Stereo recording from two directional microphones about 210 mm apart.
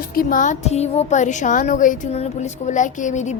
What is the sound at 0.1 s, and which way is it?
A woman's voice, 40° left (ahead or behind).